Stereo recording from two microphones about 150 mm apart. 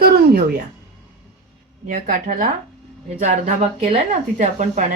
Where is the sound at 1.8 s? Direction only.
65° right (ahead or behind).